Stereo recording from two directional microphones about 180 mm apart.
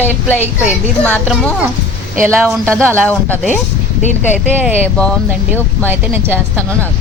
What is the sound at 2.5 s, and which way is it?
A woman's voice, 5° left (ahead or behind).